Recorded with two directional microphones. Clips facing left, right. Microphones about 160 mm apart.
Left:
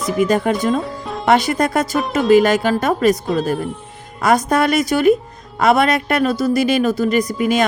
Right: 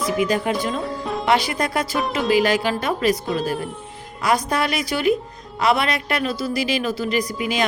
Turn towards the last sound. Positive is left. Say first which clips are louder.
# left 6 dB
turn(degrees=45)  # may be behind; listen again after turning